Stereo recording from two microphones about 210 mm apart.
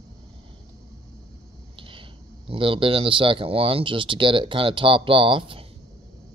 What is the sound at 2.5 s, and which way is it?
Speech, 25° right (ahead or behind).